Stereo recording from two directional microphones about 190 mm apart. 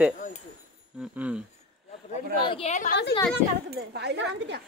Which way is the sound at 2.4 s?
30° left (ahead or behind).